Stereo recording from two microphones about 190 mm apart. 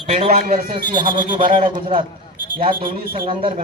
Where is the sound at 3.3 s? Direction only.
25° right (ahead or behind).